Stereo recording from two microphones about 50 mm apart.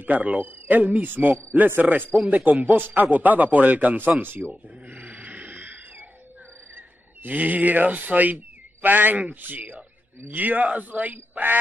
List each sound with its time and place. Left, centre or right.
0.0 s a man's voice: right
4.5 s a sound: right
7.2 s a man's voice: right